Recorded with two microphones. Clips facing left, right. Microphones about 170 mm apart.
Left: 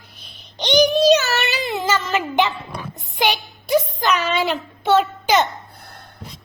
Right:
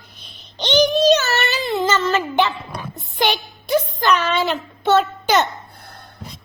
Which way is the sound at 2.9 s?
10° left (ahead or behind).